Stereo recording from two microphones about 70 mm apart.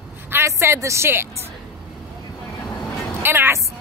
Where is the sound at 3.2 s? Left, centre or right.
Right.